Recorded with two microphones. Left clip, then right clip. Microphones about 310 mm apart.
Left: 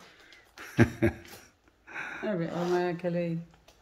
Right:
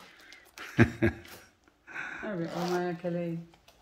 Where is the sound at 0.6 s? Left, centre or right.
Centre.